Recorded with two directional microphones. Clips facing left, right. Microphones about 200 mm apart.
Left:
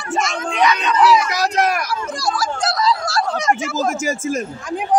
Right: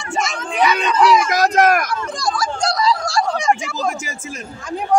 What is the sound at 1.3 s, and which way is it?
Speech, 50° right (ahead or behind).